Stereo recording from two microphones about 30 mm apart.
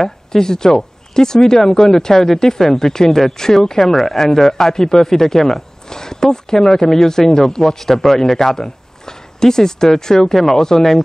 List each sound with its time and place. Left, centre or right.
0.3 s speech: centre
3.8 s speech: centre
4.2 s speech: centre
10.3 s speech: centre